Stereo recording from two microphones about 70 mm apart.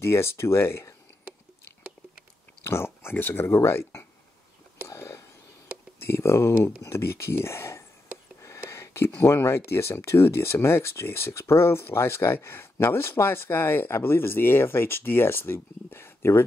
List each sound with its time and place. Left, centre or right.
0.0 s speech: left
2.6 s speech: left
4.8 s whispering: left
5.9 s speech: left
8.4 s a sound: left
9.7 s speech: left